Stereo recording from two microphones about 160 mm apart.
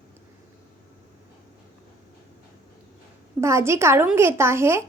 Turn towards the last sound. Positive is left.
turn(degrees=-15)  # may be behind; listen again after turning